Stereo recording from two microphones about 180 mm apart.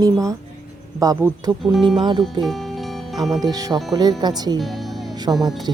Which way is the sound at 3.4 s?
20° right (ahead or behind).